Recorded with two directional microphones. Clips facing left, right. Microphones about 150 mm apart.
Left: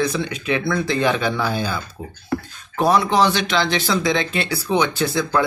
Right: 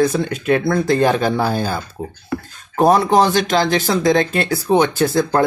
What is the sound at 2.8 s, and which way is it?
Speech, 45° right (ahead or behind).